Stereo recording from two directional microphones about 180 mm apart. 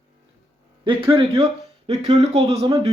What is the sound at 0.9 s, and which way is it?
Speech, 30° right (ahead or behind).